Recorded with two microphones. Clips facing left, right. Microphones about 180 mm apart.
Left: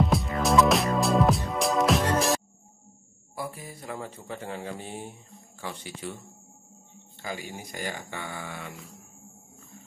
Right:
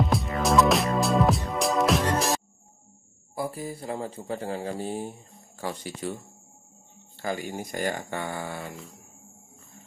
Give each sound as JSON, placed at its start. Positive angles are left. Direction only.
{"t": 0.0, "sound": "music", "side_deg": 0}
{"t": 3.3, "sound": "a man's voice", "side_deg": -30}
{"t": 7.2, "sound": "speech", "side_deg": -45}